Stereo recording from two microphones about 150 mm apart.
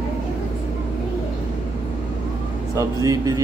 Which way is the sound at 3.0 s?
25° right (ahead or behind).